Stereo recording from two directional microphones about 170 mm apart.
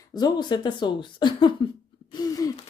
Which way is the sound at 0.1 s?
25° left (ahead or behind).